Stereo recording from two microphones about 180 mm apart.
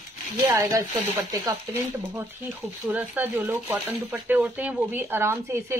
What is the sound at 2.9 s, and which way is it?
Speech, 10° right (ahead or behind).